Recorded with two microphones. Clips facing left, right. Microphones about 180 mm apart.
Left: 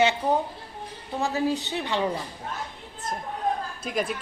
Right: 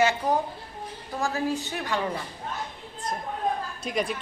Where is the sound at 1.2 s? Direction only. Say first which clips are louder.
Left 2 dB; 20° left (ahead or behind).